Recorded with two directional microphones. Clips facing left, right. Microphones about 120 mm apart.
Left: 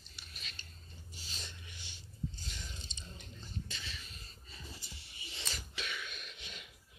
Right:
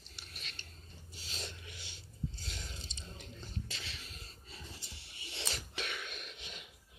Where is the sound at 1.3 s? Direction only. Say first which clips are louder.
Right 6 dB; 90° right.